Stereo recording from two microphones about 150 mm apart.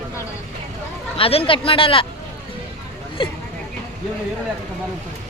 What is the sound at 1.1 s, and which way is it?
Speech, 40° left (ahead or behind).